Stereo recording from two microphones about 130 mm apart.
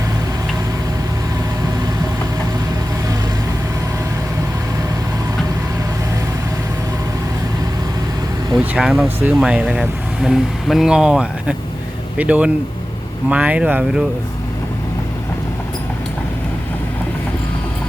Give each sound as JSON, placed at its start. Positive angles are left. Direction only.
{"t": 8.5, "sound": "speech", "side_deg": -5}